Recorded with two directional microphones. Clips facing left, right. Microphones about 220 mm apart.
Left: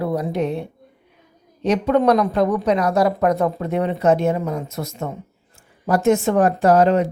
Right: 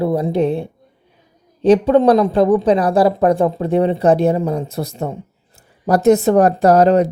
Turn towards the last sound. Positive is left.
turn(degrees=-40)  # may be behind; listen again after turning